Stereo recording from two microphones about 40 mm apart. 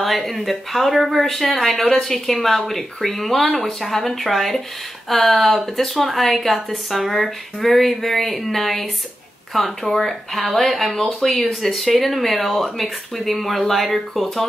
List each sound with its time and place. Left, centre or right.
0.0 s speech: centre
1.8 s a woman's voice: centre
2.0 s speech: centre
11.6 s speech: centre